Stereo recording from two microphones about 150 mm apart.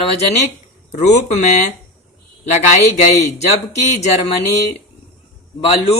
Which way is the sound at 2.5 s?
45° left (ahead or behind).